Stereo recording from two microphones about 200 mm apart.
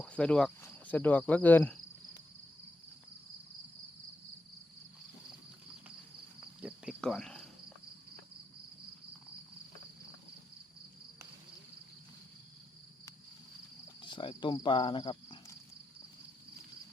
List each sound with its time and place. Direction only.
0.0 s speech: 5° left (ahead or behind)
6.6 s cricket: 5° right (ahead or behind)
14.0 s speech: 25° left (ahead or behind)